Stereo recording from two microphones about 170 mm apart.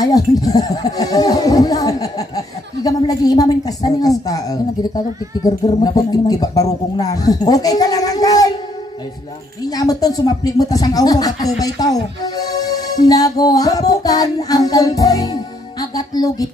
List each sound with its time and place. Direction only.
0.0 s speech: 20° left (ahead or behind)
9.6 s speech: 20° left (ahead or behind)
15.8 s music: 20° left (ahead or behind)